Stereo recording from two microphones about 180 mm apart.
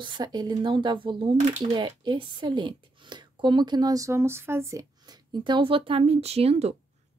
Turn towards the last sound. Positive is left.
turn(degrees=-35)  # may be behind; listen again after turning